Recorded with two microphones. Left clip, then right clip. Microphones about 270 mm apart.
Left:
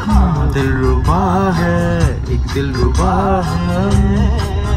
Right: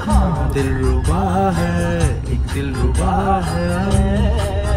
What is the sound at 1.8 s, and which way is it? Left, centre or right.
Livestock, left.